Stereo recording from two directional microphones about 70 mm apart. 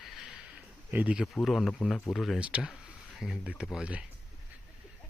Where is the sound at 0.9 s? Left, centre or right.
Right.